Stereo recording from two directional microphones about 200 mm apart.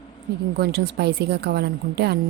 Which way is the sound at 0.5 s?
55° right (ahead or behind).